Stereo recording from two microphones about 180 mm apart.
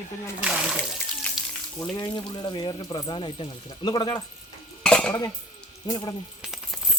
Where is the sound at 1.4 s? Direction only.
5° right (ahead or behind).